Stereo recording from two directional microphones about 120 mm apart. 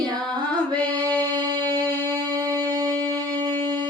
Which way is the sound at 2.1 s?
30° right (ahead or behind).